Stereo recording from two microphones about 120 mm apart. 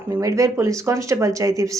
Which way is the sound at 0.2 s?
25° right (ahead or behind).